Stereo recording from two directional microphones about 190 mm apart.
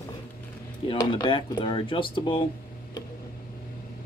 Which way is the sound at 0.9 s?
25° left (ahead or behind).